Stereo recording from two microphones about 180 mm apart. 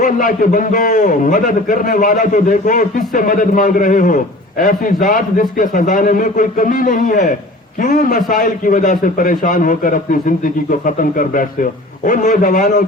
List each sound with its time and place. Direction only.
0.0 s a man's voice: 50° left (ahead or behind)